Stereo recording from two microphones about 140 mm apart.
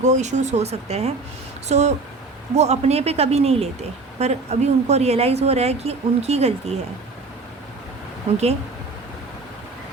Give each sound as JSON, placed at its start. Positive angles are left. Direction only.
{"t": 0.0, "sound": "a woman's voice", "side_deg": -55}